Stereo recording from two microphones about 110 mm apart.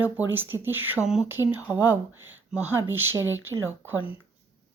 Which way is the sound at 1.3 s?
20° right (ahead or behind).